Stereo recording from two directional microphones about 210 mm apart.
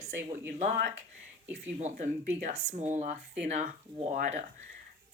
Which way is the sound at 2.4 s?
30° right (ahead or behind).